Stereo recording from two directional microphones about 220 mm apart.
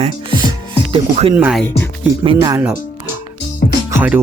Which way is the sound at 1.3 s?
5° right (ahead or behind).